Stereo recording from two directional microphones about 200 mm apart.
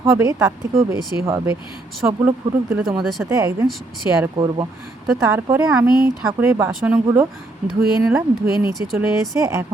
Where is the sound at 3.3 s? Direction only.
15° right (ahead or behind).